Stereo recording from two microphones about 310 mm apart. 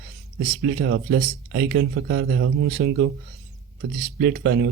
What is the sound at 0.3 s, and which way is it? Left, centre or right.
Speech, right.